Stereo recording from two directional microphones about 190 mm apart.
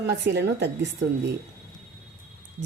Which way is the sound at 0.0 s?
65° right (ahead or behind).